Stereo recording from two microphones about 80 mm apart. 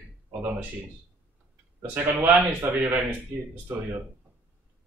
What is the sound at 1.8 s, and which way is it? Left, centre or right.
A man's voice, right.